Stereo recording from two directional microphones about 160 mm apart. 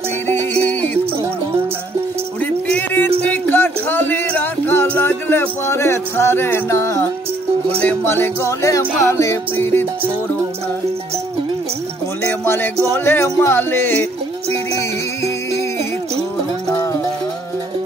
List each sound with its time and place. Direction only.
0.3 s music: 10° left (ahead or behind)
2.4 s music: 10° left (ahead or behind)
12.3 s music: 15° left (ahead or behind)